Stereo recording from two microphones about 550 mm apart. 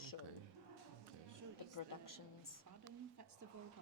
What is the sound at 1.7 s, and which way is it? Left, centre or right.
Speech, left.